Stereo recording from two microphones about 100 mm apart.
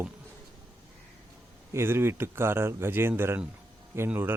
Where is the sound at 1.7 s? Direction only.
25° right (ahead or behind).